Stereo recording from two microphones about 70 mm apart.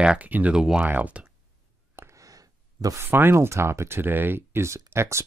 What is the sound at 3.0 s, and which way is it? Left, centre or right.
Speech, right.